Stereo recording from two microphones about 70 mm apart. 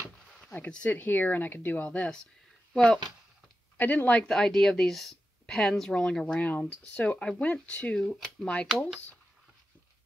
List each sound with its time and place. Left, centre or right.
0.7 s speech: centre
0.9 s speech: left; by 3.0 s centre
3.7 s speech: left
4.3 s speech: centre
8.0 s speech: centre